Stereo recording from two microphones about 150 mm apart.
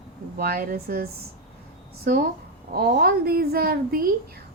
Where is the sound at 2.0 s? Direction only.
80° right.